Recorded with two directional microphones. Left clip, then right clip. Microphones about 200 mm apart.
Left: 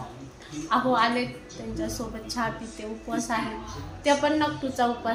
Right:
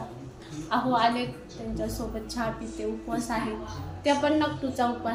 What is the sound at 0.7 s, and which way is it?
Speech, 15° left (ahead or behind).